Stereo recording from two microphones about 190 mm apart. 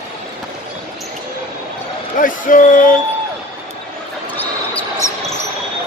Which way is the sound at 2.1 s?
45° left (ahead or behind).